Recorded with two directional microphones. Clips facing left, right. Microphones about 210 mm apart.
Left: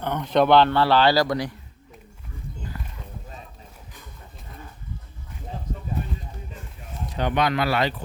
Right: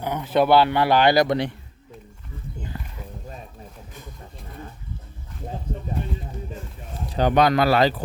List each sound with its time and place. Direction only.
0.0 s speech: 10° right (ahead or behind); by 1.5 s 25° right (ahead or behind)
2.7 s a sound: 25° right (ahead or behind)
7.1 s speech: 35° right (ahead or behind)